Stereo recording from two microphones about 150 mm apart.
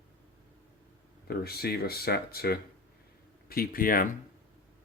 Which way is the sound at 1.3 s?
90° left.